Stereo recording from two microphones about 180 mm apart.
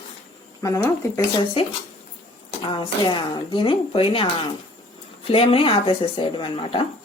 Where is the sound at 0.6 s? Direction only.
20° left (ahead or behind).